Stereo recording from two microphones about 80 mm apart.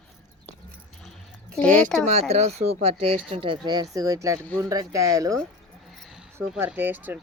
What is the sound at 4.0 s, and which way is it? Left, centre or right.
Speech, right.